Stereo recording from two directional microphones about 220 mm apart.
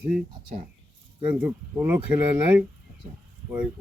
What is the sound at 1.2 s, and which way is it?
Speech, 10° right (ahead or behind).